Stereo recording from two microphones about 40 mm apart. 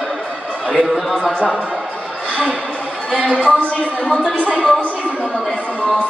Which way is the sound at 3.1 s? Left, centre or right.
Left.